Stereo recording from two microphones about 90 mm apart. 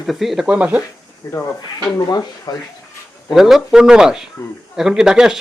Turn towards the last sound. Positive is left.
turn(degrees=-5)  # may be behind; listen again after turning